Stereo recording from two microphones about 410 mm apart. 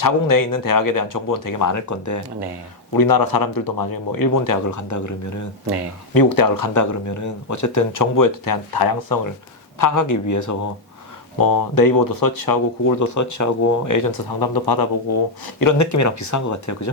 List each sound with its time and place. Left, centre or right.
0.0 s speech: left
2.9 s speech: left
6.1 s speech: left
15.5 s speech: left